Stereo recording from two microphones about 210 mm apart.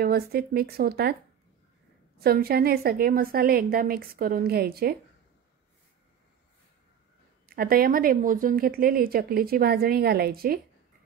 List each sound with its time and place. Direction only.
0.0 s a woman's voice: 45° right (ahead or behind)
2.1 s a woman's voice: 45° right (ahead or behind)
7.4 s a woman's voice: 45° right (ahead or behind)